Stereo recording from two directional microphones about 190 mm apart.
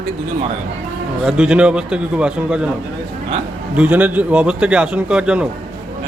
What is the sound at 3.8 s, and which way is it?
A man's voice, 10° right (ahead or behind).